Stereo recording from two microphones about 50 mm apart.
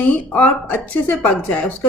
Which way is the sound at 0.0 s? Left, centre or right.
Left.